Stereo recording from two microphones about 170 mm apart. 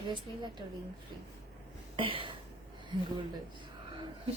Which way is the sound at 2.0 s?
30° right (ahead or behind).